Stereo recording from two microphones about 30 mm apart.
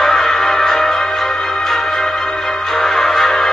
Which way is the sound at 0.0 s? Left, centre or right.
Centre.